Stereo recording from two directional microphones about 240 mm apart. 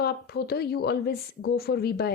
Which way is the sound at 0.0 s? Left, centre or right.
Left.